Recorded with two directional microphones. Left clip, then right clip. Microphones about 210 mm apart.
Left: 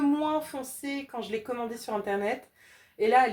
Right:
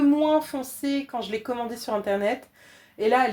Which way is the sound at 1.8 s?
40° right (ahead or behind).